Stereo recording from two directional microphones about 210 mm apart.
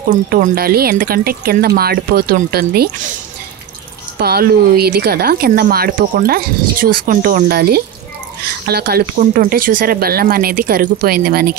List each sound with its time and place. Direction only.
0.3 s speech: 45° right (ahead or behind)
4.2 s speech: 50° right (ahead or behind)